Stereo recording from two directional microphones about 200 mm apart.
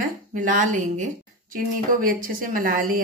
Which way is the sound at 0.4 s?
40° right (ahead or behind).